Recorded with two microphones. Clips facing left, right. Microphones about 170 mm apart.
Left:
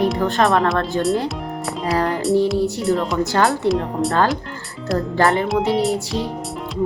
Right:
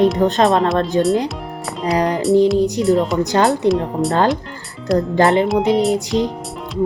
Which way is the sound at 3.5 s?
Centre (ahead or behind).